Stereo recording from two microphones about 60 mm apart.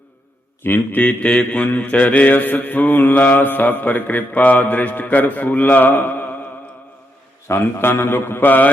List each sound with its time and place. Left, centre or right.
0.6 s mantra: left
7.4 s a man's voice: left